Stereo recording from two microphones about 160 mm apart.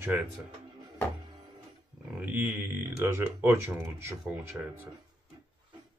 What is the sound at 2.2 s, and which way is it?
Speech, 10° right (ahead or behind).